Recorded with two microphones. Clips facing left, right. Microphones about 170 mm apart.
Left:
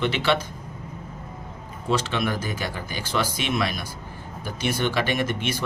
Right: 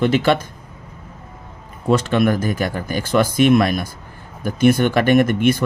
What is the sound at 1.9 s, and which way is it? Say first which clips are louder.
Speech: right 8 dB; 50° right (ahead or behind).